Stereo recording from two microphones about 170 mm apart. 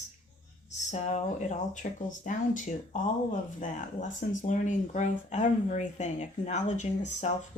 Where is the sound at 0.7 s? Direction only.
40° left (ahead or behind).